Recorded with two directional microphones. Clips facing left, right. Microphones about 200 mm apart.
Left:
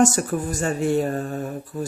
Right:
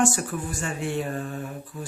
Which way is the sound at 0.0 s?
40° left (ahead or behind).